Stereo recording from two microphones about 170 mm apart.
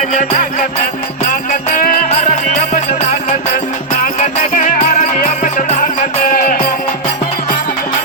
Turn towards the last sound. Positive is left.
turn(degrees=60)  # may be behind; listen again after turning